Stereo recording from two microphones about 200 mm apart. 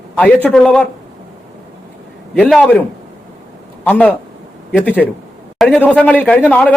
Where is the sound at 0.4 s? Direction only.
5° left (ahead or behind).